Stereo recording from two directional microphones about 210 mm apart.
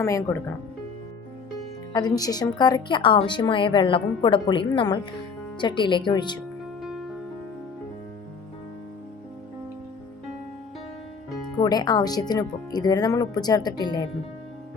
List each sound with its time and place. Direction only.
0.0 s speech: 15° left (ahead or behind)
1.9 s speech: 20° left (ahead or behind)
6.8 s music: centre (ahead or behind)
11.6 s speech: 20° left (ahead or behind)